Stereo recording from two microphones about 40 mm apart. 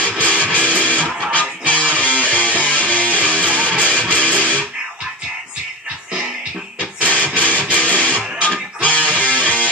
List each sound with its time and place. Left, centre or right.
0.2 s music: left
7.0 s music: left